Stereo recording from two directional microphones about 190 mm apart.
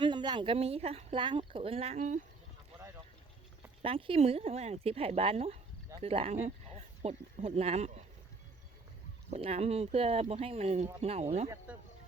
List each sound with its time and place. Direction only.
0.0 s speech: 25° right (ahead or behind); by 2.2 s 40° right (ahead or behind)
3.8 s speech: 30° right (ahead or behind)
9.3 s speech: 30° right (ahead or behind)
11.7 s speech: 10° right (ahead or behind)